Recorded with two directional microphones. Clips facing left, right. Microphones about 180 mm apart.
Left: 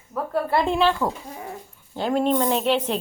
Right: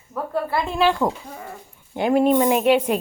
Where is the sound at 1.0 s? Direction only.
15° right (ahead or behind).